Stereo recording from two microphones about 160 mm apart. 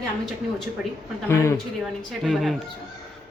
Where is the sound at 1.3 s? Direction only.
15° left (ahead or behind).